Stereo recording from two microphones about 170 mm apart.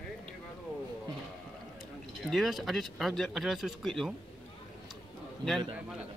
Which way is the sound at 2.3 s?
Centre (ahead or behind).